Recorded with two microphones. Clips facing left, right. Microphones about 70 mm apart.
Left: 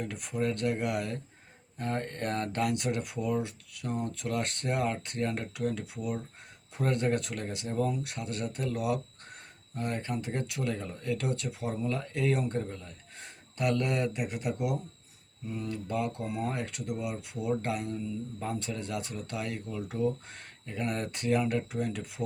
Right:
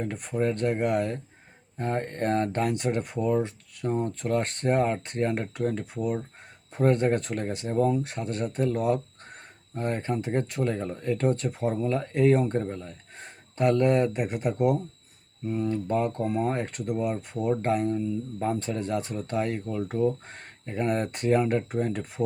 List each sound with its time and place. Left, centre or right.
0.0 s speech: right